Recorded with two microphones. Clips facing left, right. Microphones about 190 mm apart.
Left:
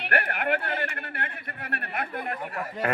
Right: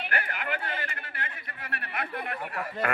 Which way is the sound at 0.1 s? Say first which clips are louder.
Left 9 dB; 60° left (ahead or behind).